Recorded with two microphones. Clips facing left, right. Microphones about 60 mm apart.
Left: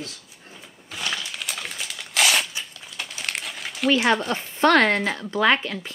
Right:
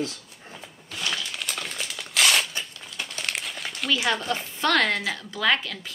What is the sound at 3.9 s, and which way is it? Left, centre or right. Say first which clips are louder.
Speech: left 4 dB; left.